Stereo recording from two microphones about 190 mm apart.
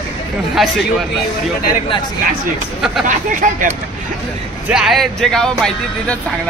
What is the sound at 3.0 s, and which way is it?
Speech, 45° right (ahead or behind).